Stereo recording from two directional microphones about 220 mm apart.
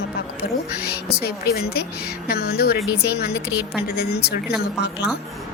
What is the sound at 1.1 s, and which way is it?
A woman's voice, 45° left (ahead or behind).